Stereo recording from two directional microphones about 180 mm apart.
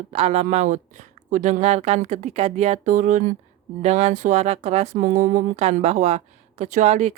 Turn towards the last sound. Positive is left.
turn(degrees=-40)  # may be behind; listen again after turning